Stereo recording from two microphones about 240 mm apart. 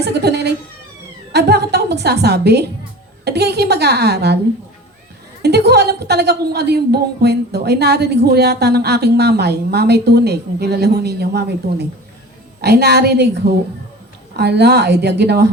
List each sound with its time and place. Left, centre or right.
0.0 s a sound: right
1.3 s a woman's voice: right
5.4 s a woman's voice: right